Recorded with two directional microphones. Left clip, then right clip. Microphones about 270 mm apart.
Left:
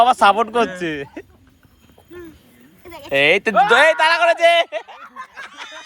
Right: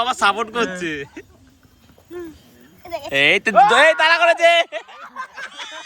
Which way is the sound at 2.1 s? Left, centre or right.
Right.